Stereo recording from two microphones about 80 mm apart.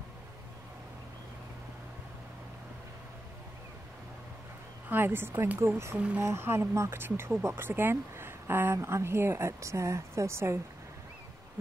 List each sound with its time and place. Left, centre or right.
4.8 s speech: right
5.9 s speech: centre
6.2 s speech: right